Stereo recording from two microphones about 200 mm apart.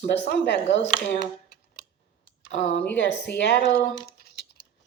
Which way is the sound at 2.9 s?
60° left (ahead or behind).